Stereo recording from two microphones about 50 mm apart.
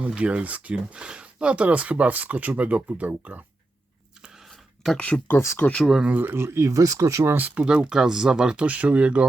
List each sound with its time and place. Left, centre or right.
0.0 s speech: right
4.2 s a sound: centre
4.9 s speech: left
5.3 s speech: left
6.1 s speech: right
6.4 s speech: right
7.3 s speech: right
7.6 s speech: centre
8.5 s speech: right